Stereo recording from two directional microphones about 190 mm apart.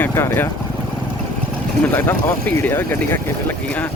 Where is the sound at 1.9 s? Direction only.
10° left (ahead or behind).